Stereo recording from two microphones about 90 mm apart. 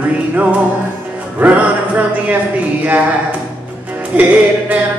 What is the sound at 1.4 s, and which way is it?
Music, 15° right (ahead or behind).